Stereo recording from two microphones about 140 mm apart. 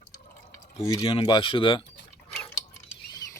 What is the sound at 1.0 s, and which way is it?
Speech, 40° left (ahead or behind).